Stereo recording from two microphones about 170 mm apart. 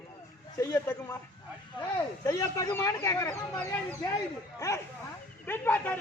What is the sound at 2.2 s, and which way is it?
Speech, 20° left (ahead or behind).